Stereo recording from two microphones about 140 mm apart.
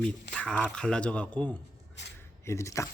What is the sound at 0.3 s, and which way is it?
Speech, 10° left (ahead or behind).